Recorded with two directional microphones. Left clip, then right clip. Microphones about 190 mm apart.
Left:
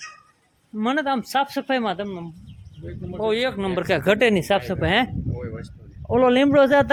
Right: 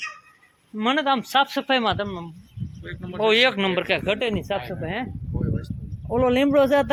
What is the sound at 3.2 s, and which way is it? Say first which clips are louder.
Speech: right 4 dB; centre (ahead or behind).